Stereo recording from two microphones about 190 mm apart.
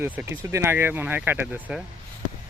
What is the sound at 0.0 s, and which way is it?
Speech, 10° right (ahead or behind).